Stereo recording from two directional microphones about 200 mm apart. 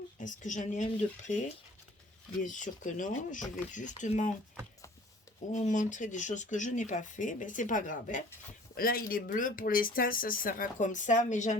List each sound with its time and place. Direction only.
0.2 s speech: 40° left (ahead or behind)
2.4 s speech: 40° left (ahead or behind)
5.5 s speech: 40° left (ahead or behind)